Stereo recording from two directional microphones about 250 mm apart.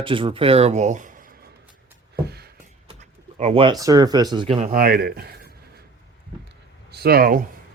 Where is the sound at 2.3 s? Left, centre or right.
Right.